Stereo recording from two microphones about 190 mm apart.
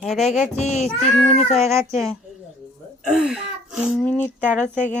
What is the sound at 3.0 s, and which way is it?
Speech, 5° right (ahead or behind).